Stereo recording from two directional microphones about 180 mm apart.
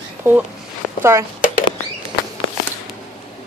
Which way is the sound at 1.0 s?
15° right (ahead or behind).